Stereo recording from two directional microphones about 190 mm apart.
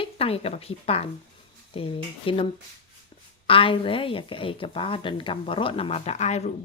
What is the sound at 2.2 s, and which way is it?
Speech, 30° left (ahead or behind).